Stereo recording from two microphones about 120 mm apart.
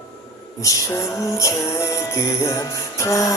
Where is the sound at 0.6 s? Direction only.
25° left (ahead or behind).